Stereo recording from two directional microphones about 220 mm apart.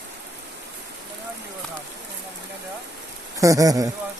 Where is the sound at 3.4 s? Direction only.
15° right (ahead or behind).